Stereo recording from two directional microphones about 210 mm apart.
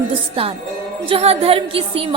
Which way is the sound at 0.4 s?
25° right (ahead or behind).